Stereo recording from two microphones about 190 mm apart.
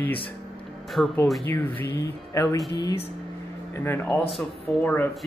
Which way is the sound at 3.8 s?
10° left (ahead or behind).